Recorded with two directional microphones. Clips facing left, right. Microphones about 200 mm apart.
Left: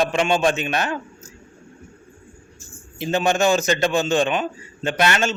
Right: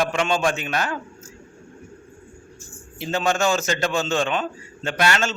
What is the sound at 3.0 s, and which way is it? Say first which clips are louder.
A man's voice: left 3 dB; 20° left (ahead or behind).